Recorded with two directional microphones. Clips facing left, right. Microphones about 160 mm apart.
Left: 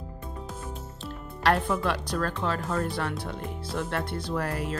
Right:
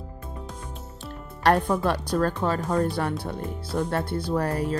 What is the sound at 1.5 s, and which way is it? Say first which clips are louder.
Speech: right 4 dB; 45° right (ahead or behind).